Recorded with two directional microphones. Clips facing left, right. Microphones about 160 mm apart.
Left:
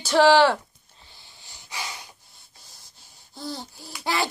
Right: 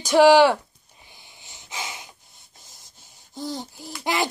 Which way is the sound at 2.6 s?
20° right (ahead or behind).